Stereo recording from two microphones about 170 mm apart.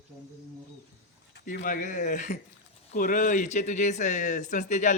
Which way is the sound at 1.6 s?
50° left (ahead or behind).